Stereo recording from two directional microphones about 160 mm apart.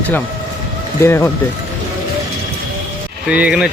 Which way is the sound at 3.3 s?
5° right (ahead or behind).